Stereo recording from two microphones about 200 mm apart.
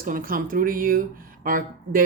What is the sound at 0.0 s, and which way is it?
Speech, 45° right (ahead or behind).